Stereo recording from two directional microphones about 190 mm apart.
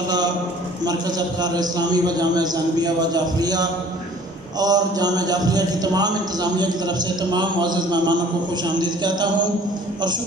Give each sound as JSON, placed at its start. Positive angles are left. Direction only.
{"t": 1.4, "sound": "a man's voice", "side_deg": -20}